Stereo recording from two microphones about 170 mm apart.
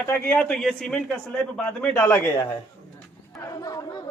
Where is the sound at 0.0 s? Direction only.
10° left (ahead or behind).